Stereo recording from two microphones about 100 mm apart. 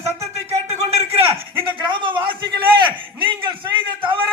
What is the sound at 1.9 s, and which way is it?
A man's voice, 55° right (ahead or behind).